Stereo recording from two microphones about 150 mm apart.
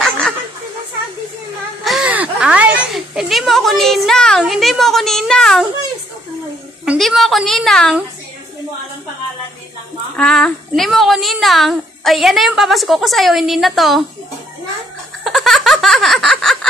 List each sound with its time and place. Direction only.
1.9 s speech: 5° right (ahead or behind)
6.8 s a woman's voice: centre (ahead or behind)
10.1 s a woman's voice: 5° left (ahead or behind)
15.2 s a sound: centre (ahead or behind)